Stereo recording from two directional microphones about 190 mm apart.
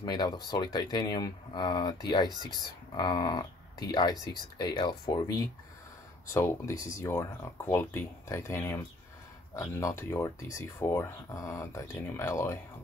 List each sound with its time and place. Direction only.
0.0 s speech: 20° left (ahead or behind)